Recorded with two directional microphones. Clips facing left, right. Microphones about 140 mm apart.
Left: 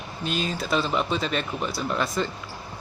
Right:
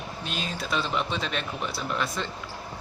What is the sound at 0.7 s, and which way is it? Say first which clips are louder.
Speech: left 4 dB; 40° left (ahead or behind).